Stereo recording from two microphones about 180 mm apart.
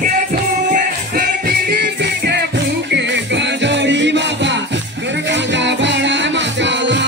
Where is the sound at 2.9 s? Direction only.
75° right (ahead or behind).